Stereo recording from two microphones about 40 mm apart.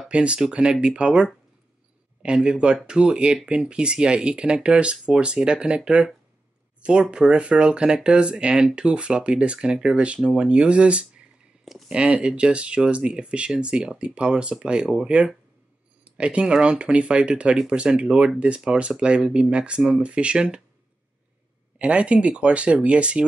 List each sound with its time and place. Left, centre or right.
0.1 s speech: right
16.0 s speech: right
21.7 s speech: right